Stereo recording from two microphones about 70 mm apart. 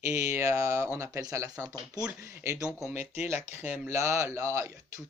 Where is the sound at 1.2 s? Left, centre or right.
Right.